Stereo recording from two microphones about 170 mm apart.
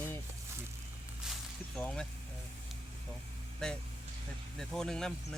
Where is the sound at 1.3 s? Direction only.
5° left (ahead or behind).